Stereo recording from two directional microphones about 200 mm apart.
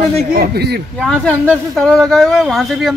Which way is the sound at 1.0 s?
5° left (ahead or behind).